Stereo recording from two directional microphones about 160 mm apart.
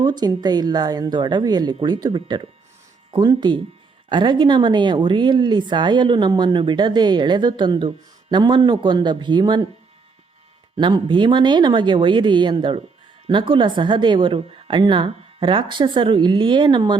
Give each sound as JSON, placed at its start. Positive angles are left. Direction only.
{"t": 0.0, "sound": "speech", "side_deg": -25}
{"t": 10.8, "sound": "a woman's voice", "side_deg": -30}